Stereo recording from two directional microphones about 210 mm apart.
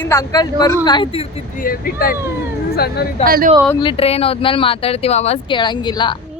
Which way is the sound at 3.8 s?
30° left (ahead or behind).